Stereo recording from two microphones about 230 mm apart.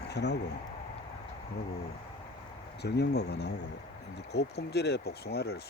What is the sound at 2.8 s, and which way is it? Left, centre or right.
Speech, left.